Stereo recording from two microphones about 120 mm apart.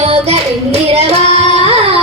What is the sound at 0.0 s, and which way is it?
Child singing, 60° right (ahead or behind).